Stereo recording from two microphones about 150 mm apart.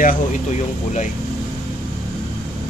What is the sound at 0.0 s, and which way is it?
Speech, 55° left (ahead or behind).